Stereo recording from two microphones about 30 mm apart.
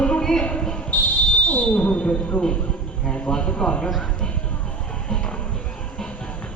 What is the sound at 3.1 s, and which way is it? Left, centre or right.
Speech, left.